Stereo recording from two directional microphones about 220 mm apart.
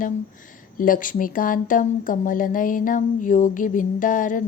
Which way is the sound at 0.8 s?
40° left (ahead or behind).